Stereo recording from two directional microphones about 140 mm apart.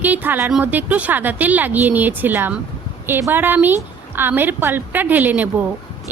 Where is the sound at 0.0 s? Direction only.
15° right (ahead or behind).